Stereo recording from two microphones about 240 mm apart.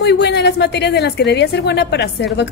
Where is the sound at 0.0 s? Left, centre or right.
Left.